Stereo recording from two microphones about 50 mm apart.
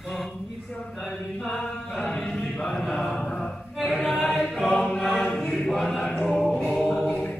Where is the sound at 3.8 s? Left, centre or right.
Centre.